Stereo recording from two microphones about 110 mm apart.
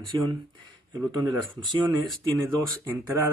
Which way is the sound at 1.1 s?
40° right (ahead or behind).